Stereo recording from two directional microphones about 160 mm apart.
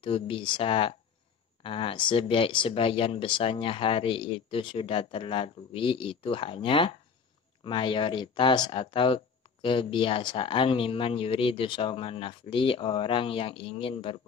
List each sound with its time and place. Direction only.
0.0 s speech: 35° left (ahead or behind)